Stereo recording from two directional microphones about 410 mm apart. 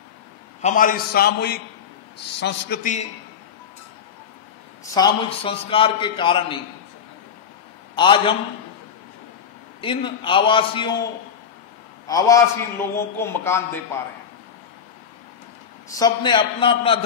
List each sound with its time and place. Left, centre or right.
0.6 s a man's voice: centre
4.9 s a man's voice: centre
7.9 s a man's voice: centre
9.8 s a man's voice: centre
12.1 s a man's voice: centre
15.9 s a man's voice: centre